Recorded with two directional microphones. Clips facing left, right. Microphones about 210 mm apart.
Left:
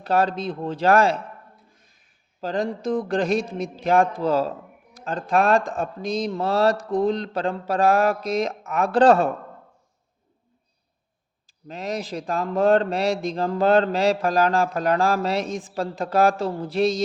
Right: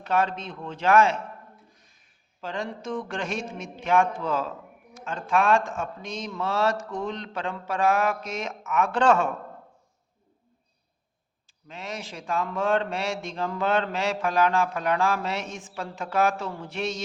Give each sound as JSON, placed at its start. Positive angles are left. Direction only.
{"t": 0.0, "sound": "speech", "side_deg": 35}
{"t": 2.4, "sound": "speech", "side_deg": 35}
{"t": 11.4, "sound": "speech", "side_deg": 35}